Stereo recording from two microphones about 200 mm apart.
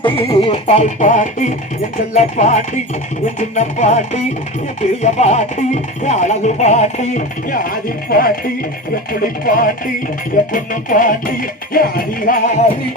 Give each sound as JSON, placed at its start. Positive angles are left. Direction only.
{"t": 0.0, "sound": "music", "side_deg": 30}